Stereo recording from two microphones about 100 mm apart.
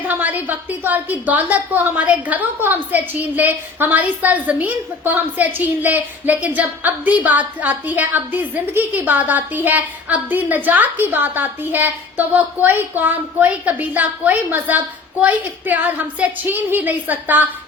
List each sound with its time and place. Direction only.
0.0 s a woman's voice: 15° right (ahead or behind)